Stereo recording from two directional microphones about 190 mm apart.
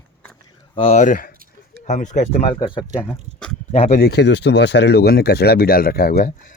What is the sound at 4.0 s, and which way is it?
Speech, 60° left (ahead or behind).